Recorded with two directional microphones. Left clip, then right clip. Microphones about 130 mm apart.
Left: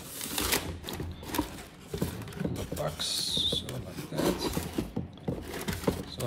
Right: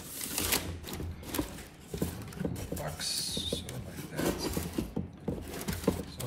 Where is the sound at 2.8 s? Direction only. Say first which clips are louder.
Left 4 dB; 20° left (ahead or behind).